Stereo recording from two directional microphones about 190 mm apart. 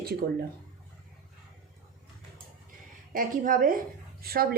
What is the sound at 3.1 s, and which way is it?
A woman's voice, 45° right (ahead or behind).